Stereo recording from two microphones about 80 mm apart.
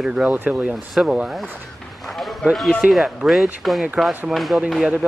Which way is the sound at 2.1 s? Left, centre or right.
Centre.